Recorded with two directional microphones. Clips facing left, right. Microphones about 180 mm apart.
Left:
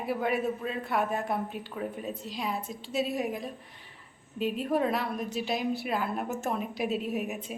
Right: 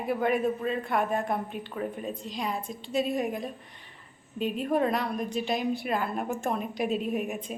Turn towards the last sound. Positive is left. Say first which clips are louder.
# right 2 dB
turn(degrees=5)  # may be behind; listen again after turning